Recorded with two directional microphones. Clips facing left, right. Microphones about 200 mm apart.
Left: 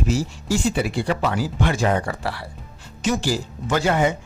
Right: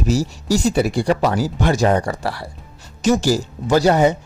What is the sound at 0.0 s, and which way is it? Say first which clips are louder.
Speech: right 3 dB; 40° right (ahead or behind).